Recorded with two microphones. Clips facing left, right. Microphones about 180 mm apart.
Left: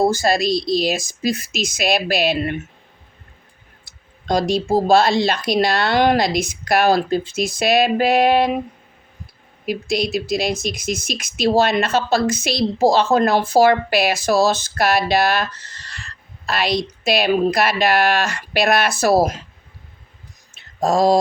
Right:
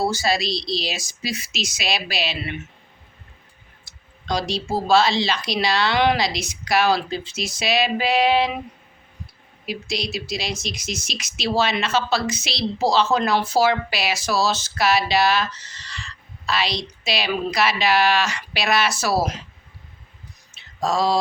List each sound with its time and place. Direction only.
0.0 s speech: 50° left (ahead or behind)
4.3 s speech: 50° left (ahead or behind)
9.6 s speech: 50° left (ahead or behind)
20.6 s a sound: 50° left (ahead or behind)